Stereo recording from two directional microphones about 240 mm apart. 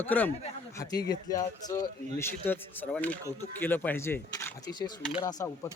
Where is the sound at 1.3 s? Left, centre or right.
Centre.